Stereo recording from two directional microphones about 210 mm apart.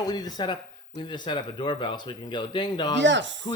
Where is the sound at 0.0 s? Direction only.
20° left (ahead or behind).